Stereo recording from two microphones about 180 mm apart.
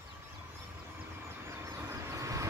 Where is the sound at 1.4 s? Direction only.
15° right (ahead or behind).